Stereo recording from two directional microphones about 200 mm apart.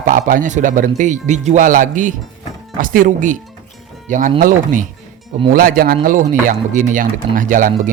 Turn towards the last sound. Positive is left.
turn(degrees=-40)  # may be behind; listen again after turning